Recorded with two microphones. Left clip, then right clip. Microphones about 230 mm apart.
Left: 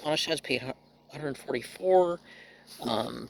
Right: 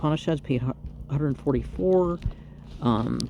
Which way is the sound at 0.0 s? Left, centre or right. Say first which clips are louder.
Right 2 dB; left.